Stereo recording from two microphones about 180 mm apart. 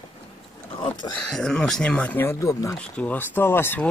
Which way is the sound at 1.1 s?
5° left (ahead or behind).